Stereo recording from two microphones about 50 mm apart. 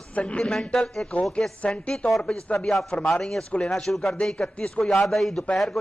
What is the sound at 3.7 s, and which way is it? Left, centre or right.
A man's voice, centre.